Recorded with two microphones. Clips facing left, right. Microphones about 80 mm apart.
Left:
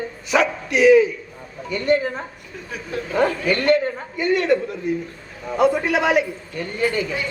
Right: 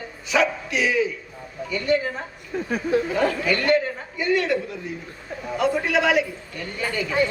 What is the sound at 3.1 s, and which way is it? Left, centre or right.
A man's voice, left.